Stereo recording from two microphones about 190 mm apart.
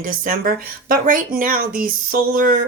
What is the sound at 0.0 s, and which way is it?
Speech, 45° right (ahead or behind).